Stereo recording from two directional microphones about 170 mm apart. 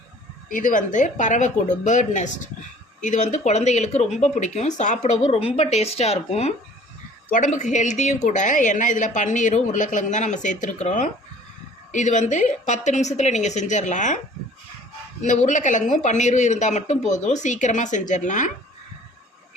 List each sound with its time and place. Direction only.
0.4 s a woman's voice: 50° left (ahead or behind)
7.3 s a woman's voice: 50° left (ahead or behind)
15.2 s a woman's voice: 45° left (ahead or behind)